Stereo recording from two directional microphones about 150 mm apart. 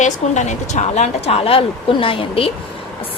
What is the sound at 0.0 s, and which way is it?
A woman's voice, 50° left (ahead or behind).